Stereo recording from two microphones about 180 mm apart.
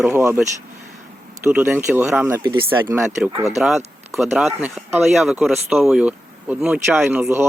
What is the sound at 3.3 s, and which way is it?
Speech, 30° right (ahead or behind).